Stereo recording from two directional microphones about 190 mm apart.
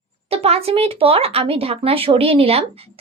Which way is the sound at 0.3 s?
30° right (ahead or behind).